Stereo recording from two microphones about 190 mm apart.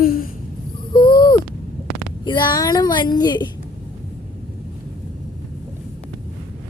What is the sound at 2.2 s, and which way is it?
Speech, 25° left (ahead or behind).